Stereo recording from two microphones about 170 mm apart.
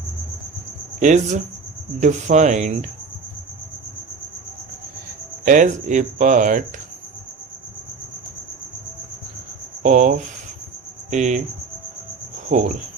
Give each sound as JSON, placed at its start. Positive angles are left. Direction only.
{"t": 0.9, "sound": "speech", "side_deg": -50}
{"t": 5.5, "sound": "speech", "side_deg": -50}
{"t": 9.8, "sound": "speech", "side_deg": -50}
{"t": 12.5, "sound": "cricket", "side_deg": -45}